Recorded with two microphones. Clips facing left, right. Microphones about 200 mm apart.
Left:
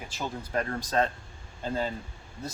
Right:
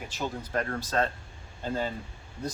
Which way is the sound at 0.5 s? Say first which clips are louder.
Left 2 dB; 15° left (ahead or behind).